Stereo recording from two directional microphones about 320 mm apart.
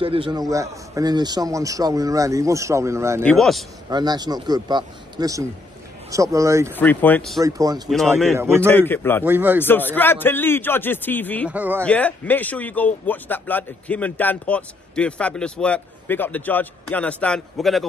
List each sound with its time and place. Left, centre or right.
0.0 s a man's voice: centre
3.9 s a man's voice: centre
6.7 s a man's voice: centre
7.4 s a man's voice: centre
7.9 s a man's voice: centre
9.2 s a man's voice: centre
9.7 s a man's voice: centre